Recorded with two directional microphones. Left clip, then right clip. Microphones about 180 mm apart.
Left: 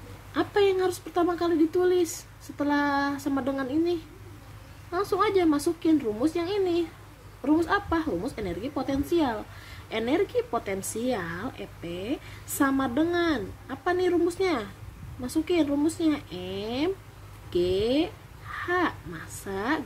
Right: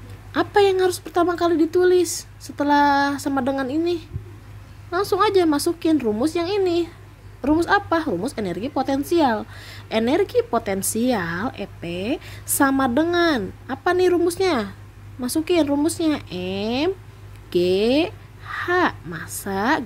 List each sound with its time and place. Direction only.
0.3 s a woman's voice: 50° right (ahead or behind)